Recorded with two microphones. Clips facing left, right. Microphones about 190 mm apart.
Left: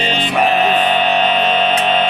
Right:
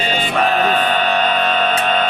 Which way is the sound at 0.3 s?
15° left (ahead or behind).